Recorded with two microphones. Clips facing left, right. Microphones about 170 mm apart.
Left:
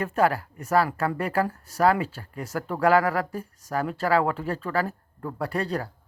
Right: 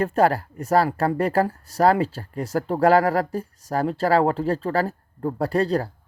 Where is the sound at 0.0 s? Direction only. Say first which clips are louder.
Right 4 dB; 35° right (ahead or behind).